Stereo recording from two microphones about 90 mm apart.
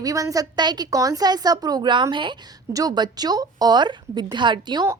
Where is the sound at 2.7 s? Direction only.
45° right (ahead or behind).